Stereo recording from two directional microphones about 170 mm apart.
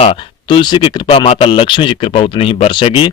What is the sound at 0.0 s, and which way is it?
Speech, 30° left (ahead or behind).